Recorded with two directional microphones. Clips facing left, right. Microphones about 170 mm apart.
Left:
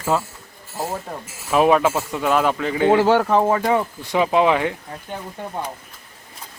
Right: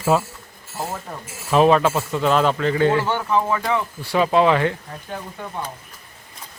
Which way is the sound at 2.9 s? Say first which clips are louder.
Left 6 dB; 90° left.